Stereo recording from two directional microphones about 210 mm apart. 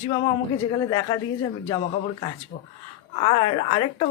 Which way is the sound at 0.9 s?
20° left (ahead or behind).